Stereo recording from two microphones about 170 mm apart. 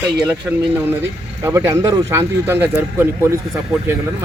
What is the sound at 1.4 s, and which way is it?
Speech, 15° right (ahead or behind).